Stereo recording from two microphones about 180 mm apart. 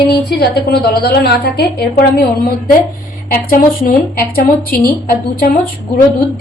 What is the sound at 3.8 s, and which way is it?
A woman's voice, 55° left (ahead or behind).